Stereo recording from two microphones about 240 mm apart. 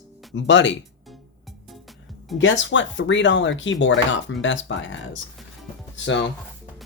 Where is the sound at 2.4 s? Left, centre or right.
Left.